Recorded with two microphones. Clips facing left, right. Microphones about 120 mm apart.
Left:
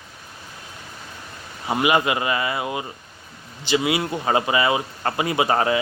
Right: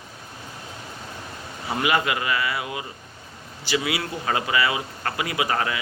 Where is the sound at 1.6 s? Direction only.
20° left (ahead or behind).